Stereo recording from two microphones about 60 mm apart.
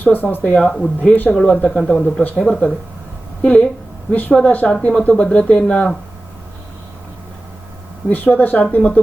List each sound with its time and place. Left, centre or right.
0.0 s speech: left
0.7 s speech: centre
1.3 s speech: centre
8.1 s speech: left